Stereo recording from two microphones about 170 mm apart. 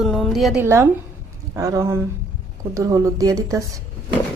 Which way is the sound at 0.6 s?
15° right (ahead or behind).